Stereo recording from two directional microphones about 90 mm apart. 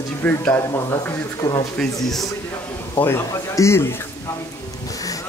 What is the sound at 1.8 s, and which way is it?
Speech, 5° left (ahead or behind).